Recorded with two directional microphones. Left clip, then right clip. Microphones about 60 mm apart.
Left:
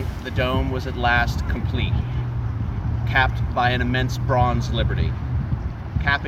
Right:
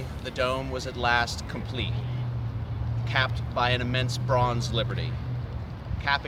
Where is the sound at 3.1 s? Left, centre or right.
Right.